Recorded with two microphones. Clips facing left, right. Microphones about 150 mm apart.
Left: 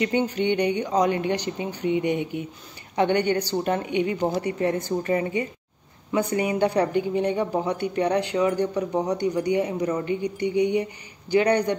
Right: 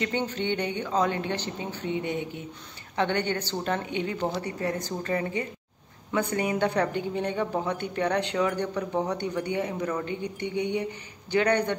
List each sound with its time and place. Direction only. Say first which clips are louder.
0.0 s a man's voice: left 6 dB; 10° left (ahead or behind)